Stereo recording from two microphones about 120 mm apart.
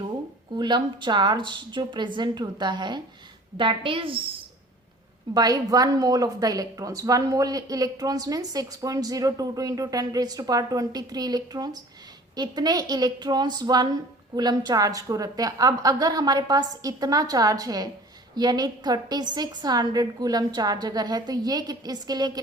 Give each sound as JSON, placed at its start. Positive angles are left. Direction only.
{"t": 0.5, "sound": "a woman's voice", "side_deg": -40}
{"t": 5.3, "sound": "a woman's voice", "side_deg": -35}